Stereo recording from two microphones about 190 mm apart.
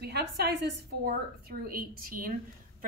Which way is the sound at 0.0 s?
60° right (ahead or behind).